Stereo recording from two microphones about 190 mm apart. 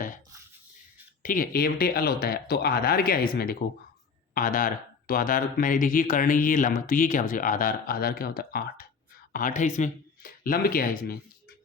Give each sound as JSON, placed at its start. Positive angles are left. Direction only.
{"t": 1.2, "sound": "speech", "side_deg": 45}